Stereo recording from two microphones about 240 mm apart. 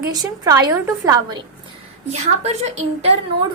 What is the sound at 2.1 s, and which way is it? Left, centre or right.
A woman's voice, right.